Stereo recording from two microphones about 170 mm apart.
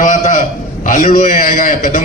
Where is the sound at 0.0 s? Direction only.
45° left (ahead or behind).